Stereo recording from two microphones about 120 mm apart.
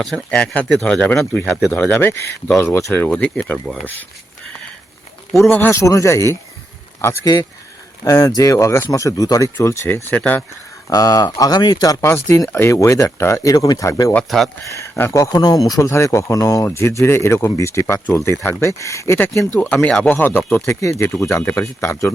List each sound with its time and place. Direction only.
0.0 s speech: 5° left (ahead or behind)
5.5 s speech: 15° left (ahead or behind)
10.8 s speech: 30° left (ahead or behind)
14.3 s speech: centre (ahead or behind)
14.7 s speech: 20° left (ahead or behind)